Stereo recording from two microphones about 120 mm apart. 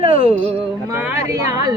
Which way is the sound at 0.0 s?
50° right (ahead or behind).